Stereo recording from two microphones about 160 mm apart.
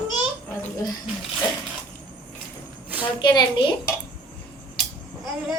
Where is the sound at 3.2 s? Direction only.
30° left (ahead or behind).